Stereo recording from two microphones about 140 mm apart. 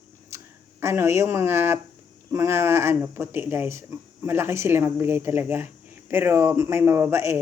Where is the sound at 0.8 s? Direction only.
20° right (ahead or behind).